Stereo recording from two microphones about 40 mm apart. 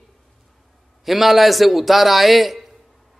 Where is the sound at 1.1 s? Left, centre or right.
Centre.